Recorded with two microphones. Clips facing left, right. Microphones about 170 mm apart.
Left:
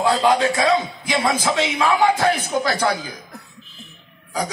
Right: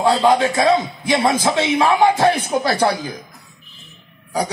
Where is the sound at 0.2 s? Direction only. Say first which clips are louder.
Right 2 dB; 30° right (ahead or behind).